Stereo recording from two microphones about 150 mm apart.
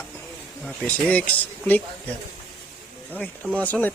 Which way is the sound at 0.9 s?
10° left (ahead or behind).